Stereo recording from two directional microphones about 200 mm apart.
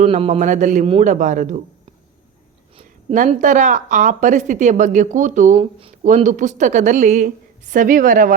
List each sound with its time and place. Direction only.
0.0 s a woman's voice: 30° right (ahead or behind)
2.7 s a woman's voice: 35° right (ahead or behind)